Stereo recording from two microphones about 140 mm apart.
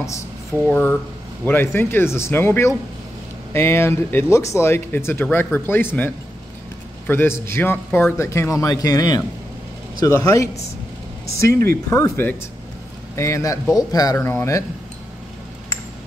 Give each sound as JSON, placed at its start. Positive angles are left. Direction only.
{"t": 0.7, "sound": "a man's voice", "side_deg": 10}